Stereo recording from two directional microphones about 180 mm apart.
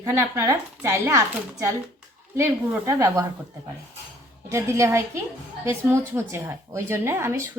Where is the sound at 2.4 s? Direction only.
15° right (ahead or behind).